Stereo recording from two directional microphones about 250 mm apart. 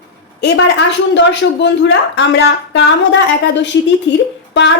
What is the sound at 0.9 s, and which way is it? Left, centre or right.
A woman's voice, left.